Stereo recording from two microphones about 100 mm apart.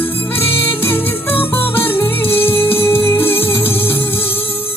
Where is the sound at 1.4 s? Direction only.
20° left (ahead or behind).